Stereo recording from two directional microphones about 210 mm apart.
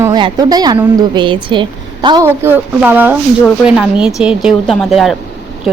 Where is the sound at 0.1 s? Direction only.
20° right (ahead or behind).